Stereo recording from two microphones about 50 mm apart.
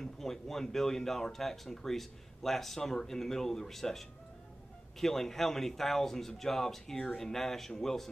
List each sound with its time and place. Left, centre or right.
0.0 s speech: centre